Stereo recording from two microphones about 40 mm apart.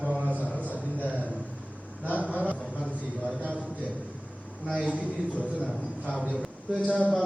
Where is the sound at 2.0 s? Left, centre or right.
Right.